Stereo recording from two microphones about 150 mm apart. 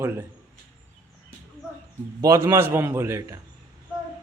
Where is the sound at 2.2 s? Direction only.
20° right (ahead or behind).